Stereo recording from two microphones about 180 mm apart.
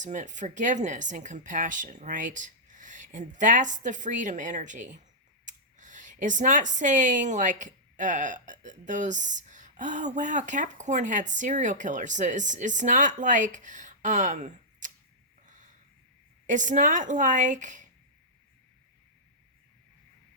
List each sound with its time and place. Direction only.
0.0 s speech: 45° right (ahead or behind)
15.4 s a sound: 45° right (ahead or behind)
16.5 s speech: 45° right (ahead or behind)